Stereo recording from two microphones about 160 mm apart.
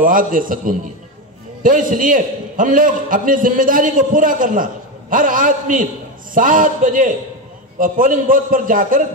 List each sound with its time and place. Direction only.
0.0 s a man's voice: 60° right (ahead or behind)